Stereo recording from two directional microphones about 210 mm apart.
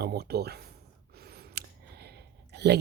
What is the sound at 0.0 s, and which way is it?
Speech, 50° right (ahead or behind).